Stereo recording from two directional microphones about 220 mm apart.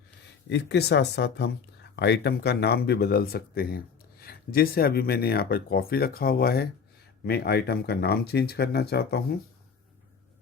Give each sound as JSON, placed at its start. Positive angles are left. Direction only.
{"t": 0.5, "sound": "speech", "side_deg": 50}